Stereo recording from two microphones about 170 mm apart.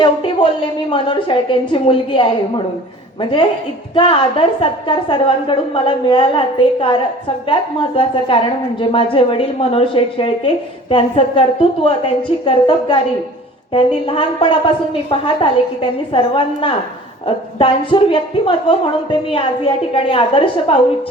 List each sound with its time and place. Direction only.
0.0 s a woman's voice: 30° left (ahead or behind)
3.9 s a woman's voice: 30° left (ahead or behind)